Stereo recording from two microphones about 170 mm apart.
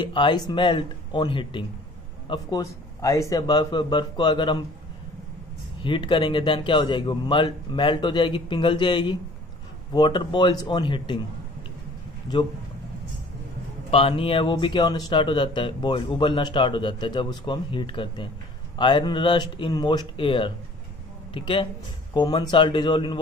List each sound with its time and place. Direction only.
0.0 s a man's voice: 30° left (ahead or behind)
2.6 s speech: 20° left (ahead or behind)
5.8 s speech: 30° left (ahead or behind)
12.3 s speech: 30° left (ahead or behind)
13.8 s speech: 35° left (ahead or behind)